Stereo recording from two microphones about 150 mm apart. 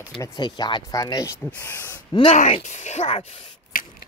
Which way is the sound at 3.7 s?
70° left (ahead or behind).